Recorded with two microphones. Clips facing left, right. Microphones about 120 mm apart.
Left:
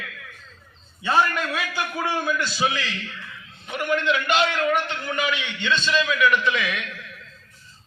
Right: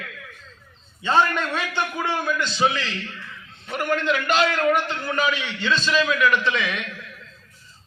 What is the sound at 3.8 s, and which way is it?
A man's voice, 40° right (ahead or behind).